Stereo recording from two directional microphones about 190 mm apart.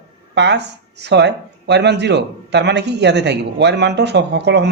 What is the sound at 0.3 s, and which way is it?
Speech, 65° right (ahead or behind).